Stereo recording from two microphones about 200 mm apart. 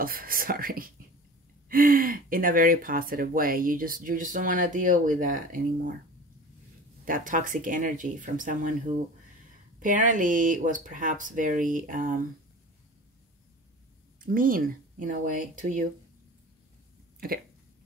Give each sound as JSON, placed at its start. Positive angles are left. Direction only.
{"t": 0.0, "sound": "speech", "side_deg": -45}
{"t": 7.1, "sound": "speech", "side_deg": -40}
{"t": 14.2, "sound": "speech", "side_deg": -45}